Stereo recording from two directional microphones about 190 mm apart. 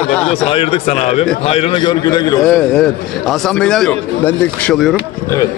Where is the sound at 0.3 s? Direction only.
30° left (ahead or behind).